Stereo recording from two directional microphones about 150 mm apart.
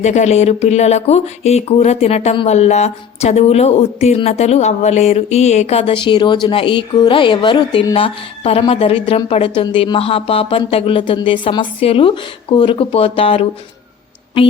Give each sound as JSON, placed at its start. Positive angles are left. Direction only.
{"t": 0.0, "sound": "a woman's voice", "side_deg": 50}